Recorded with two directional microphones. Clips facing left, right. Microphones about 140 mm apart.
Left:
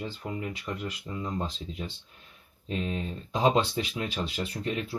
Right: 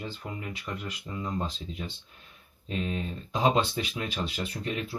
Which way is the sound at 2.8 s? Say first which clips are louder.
Right 2 dB; 30° left (ahead or behind).